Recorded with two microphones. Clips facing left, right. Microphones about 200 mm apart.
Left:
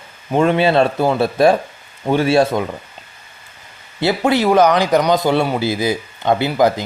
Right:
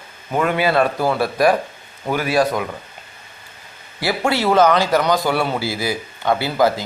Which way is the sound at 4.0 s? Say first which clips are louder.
Left 4 dB; 20° left (ahead or behind).